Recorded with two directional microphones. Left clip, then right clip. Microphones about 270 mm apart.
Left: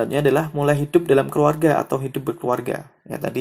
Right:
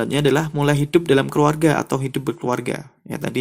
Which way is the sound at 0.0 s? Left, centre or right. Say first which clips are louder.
Even; right.